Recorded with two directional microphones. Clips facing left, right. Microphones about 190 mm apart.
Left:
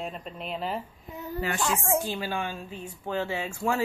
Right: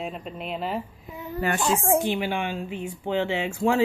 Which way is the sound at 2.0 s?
20° right (ahead or behind).